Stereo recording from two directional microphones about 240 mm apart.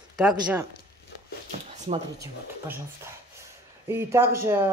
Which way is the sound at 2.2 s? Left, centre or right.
Centre.